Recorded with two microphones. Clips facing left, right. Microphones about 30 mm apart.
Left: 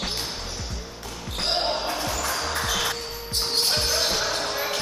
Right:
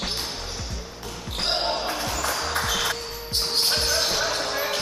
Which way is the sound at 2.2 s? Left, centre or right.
Centre.